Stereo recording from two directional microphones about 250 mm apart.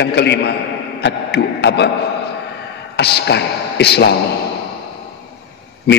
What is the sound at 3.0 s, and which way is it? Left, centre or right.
A man's voice, left.